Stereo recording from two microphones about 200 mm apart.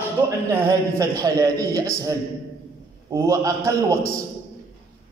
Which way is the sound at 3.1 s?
15° right (ahead or behind).